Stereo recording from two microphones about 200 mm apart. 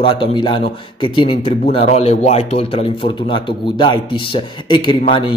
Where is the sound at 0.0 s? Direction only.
25° left (ahead or behind).